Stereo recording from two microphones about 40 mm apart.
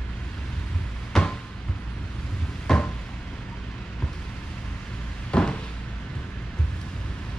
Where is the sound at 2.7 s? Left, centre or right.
Centre.